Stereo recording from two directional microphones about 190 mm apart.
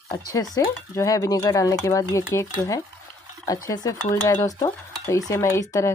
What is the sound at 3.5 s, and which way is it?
Stir, 20° left (ahead or behind).